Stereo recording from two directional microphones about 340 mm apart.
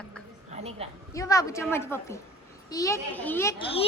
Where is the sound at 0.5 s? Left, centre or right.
Centre.